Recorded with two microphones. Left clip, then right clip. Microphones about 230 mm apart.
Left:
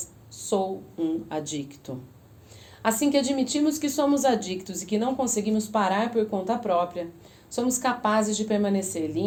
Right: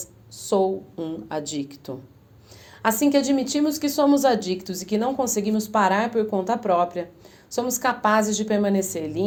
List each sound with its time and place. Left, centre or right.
0.3 s a woman's voice: right